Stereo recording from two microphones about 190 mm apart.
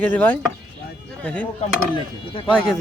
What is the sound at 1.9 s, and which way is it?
Speech, 25° left (ahead or behind).